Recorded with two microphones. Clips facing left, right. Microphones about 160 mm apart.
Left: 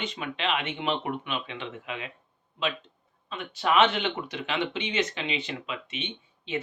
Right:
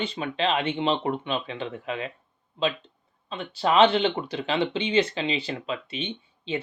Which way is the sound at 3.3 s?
30° right (ahead or behind).